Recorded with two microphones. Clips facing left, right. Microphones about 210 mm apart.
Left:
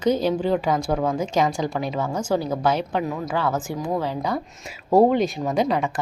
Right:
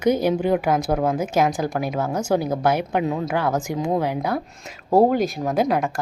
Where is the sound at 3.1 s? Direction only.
25° right (ahead or behind).